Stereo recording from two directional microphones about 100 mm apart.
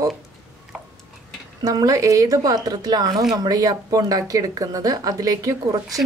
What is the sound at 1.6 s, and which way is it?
Speech, 35° right (ahead or behind).